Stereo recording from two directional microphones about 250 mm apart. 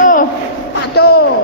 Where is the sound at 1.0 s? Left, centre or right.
Left.